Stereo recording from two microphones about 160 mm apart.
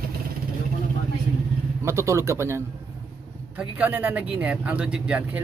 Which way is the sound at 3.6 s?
10° right (ahead or behind).